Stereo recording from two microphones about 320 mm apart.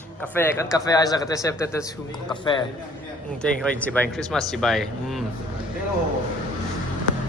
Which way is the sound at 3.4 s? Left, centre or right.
Centre.